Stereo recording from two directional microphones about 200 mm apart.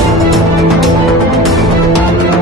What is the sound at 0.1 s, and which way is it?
Music, centre (ahead or behind).